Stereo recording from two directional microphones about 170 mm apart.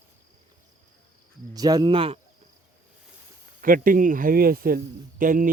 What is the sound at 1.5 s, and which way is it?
Cricket, 20° right (ahead or behind).